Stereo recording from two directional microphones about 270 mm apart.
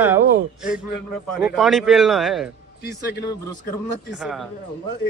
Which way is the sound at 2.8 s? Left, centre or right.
Left.